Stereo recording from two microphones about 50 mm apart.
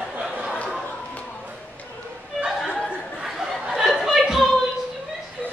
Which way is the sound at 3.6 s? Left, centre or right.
Centre.